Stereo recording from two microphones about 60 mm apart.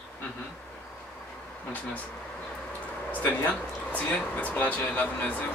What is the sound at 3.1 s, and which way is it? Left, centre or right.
Speech, left.